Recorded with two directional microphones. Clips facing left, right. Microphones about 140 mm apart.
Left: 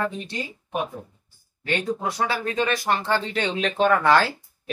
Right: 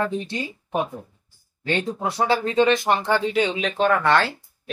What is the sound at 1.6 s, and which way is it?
Speech, 25° right (ahead or behind).